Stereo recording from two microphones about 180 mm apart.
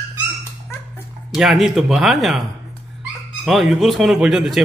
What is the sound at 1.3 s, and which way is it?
Speech, centre (ahead or behind).